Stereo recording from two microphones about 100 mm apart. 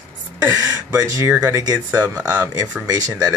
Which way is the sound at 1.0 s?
30° right (ahead or behind).